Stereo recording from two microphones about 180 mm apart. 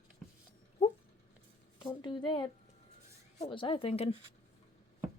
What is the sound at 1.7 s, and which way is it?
Speech, 25° left (ahead or behind).